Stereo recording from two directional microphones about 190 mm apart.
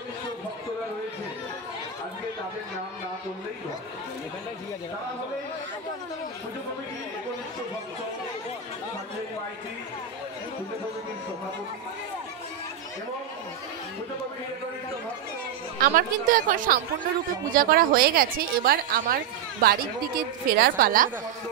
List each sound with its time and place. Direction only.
15.8 s a woman's voice: 45° right (ahead or behind)